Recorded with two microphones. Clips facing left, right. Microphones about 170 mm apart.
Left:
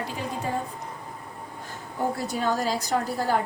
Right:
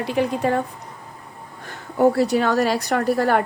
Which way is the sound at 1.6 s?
80° right.